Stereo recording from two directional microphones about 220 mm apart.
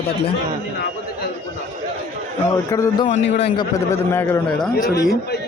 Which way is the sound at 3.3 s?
30° left (ahead or behind).